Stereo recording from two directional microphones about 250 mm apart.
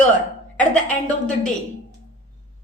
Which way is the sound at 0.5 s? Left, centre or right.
Centre.